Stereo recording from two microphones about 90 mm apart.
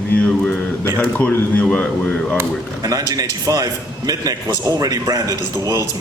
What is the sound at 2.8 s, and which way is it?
A man's voice, 45° right (ahead or behind).